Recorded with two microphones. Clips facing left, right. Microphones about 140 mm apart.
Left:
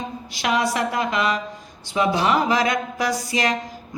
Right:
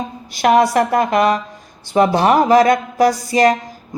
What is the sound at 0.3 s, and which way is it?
A woman's voice, 50° right (ahead or behind).